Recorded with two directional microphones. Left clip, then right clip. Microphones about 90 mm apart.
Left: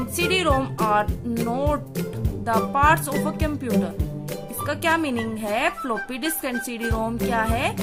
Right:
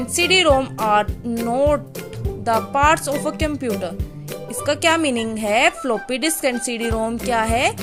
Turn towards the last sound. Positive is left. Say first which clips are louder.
# right 5 dB
turn(degrees=-35)  # may be behind; listen again after turning